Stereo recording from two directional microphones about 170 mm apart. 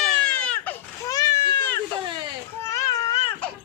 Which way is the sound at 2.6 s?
15° left (ahead or behind).